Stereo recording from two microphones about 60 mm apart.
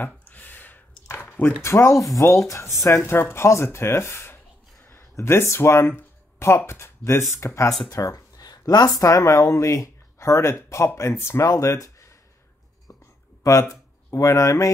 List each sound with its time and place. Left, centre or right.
0.3 s a sound: left
1.6 s speech: left
3.1 s speech: left
5.9 s a sound: left
6.5 s speech: left
7.9 s speech: left
11.5 s speech: left
13.4 s speech: left